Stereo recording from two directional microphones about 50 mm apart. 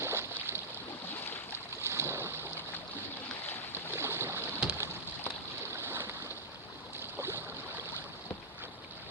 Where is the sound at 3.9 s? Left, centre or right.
Right.